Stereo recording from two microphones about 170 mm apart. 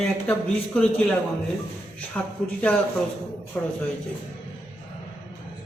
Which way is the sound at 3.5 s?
10° left (ahead or behind).